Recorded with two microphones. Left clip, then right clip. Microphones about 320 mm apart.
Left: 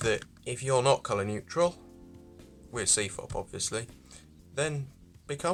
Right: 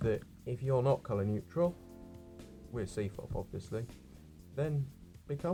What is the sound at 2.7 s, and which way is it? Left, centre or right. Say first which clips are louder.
Speech: left 9 dB; left.